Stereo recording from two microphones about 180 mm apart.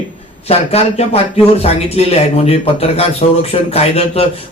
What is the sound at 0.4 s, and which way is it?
Speech, 35° left (ahead or behind).